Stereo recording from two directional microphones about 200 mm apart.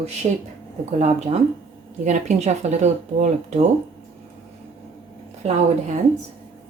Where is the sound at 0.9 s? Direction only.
35° right (ahead or behind).